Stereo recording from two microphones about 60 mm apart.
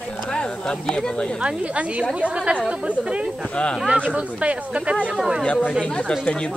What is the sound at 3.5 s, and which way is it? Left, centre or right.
Speech, centre.